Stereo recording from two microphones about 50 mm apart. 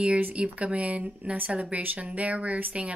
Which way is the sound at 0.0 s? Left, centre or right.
Right.